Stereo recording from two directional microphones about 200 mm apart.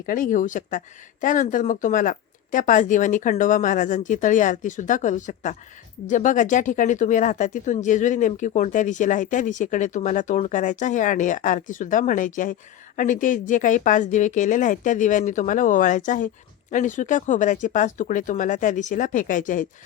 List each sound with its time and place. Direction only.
0.0 s speech: 40° left (ahead or behind)